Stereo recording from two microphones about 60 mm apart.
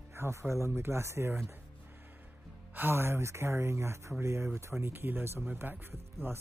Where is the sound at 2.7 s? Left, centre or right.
Right.